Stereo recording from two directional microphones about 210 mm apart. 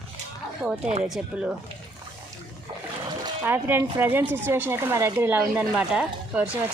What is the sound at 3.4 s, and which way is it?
Speech, 10° right (ahead or behind).